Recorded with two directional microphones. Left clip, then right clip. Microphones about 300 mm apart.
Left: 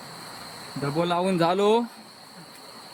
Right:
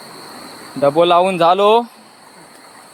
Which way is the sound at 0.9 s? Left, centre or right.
Centre.